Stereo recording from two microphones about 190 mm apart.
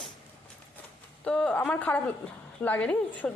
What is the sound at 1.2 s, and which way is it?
A woman's voice, 5° left (ahead or behind).